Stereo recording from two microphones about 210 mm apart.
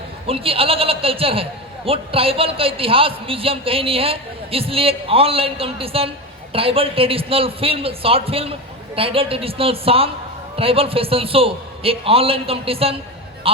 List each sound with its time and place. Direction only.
0.3 s a man's voice: 25° right (ahead or behind)